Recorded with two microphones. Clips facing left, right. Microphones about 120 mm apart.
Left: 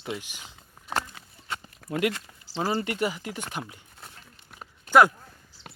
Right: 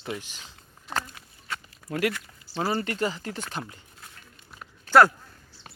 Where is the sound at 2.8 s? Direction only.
15° left (ahead or behind).